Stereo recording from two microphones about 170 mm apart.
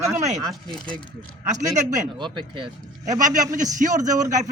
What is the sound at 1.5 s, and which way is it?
Speech, 45° right (ahead or behind).